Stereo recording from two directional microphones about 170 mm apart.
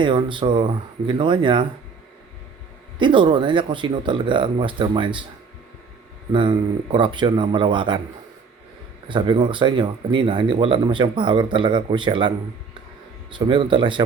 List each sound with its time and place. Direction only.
0.0 s speech: 30° right (ahead or behind)
3.0 s speech: 30° right (ahead or behind)
6.3 s speech: 30° right (ahead or behind)
9.0 s speech: 25° right (ahead or behind)
13.3 s speech: 30° right (ahead or behind)